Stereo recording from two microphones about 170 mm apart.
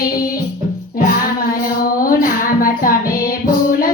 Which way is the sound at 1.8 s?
55° left (ahead or behind).